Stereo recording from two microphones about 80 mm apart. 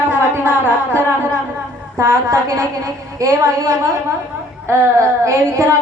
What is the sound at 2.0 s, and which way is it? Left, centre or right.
A woman's voice, right.